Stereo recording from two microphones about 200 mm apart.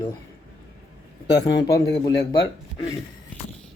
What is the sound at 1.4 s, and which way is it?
Speech, 60° left (ahead or behind).